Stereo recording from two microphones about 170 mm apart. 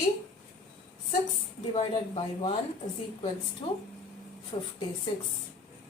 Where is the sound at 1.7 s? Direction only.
35° left (ahead or behind).